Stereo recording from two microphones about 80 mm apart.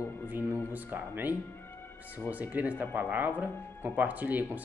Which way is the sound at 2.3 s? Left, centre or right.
Centre.